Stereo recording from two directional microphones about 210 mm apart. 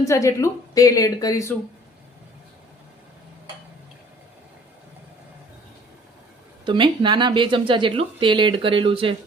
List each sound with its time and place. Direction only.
0.0 s speech: 15° left (ahead or behind)
6.7 s speech: 20° right (ahead or behind)